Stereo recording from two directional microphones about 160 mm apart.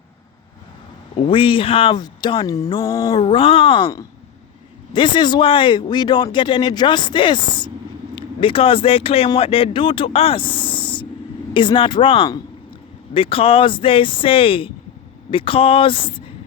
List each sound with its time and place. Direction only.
1.2 s speech: 35° left (ahead or behind)
3.1 s speech: 35° left (ahead or behind)
4.9 s speech: 30° left (ahead or behind)